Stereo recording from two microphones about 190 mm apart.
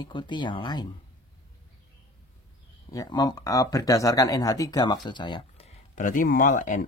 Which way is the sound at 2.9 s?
20° left (ahead or behind).